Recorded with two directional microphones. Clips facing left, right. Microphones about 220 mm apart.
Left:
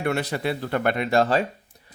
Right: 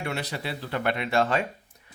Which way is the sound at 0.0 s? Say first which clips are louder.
Left 7 dB; 50° left (ahead or behind).